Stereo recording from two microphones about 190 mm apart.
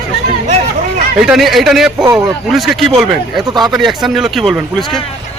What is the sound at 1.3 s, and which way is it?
Speech, centre (ahead or behind).